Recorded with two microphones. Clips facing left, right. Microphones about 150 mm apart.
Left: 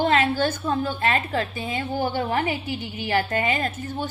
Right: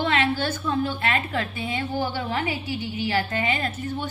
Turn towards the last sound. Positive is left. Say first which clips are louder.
# left 1 dB
turn(degrees=45)  # may be behind; listen again after turning